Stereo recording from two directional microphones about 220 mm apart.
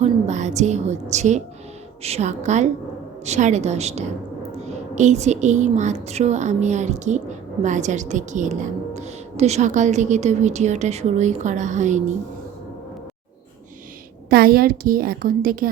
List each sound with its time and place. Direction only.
0.0 s a woman's voice: 30° right (ahead or behind)
14.3 s speech: 45° right (ahead or behind)